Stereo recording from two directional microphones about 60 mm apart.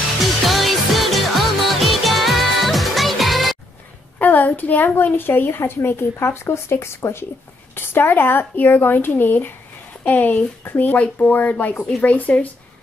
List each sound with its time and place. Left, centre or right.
0.2 s music: centre
4.2 s a woman's voice: left
7.7 s a woman's voice: left